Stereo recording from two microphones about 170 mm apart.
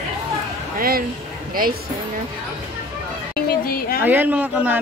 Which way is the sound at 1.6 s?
55° right (ahead or behind).